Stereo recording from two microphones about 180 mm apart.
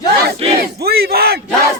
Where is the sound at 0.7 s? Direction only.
60° right (ahead or behind).